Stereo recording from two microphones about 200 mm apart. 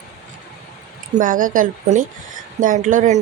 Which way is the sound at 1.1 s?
40° right (ahead or behind).